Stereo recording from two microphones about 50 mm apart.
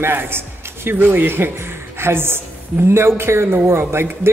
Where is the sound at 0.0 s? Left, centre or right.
Right.